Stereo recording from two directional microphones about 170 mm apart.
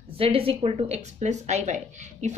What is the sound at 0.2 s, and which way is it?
A woman's voice, 35° right (ahead or behind).